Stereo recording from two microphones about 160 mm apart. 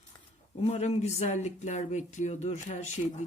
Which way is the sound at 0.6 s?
40° left (ahead or behind).